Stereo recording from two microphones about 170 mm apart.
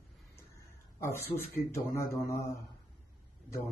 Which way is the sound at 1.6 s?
20° left (ahead or behind).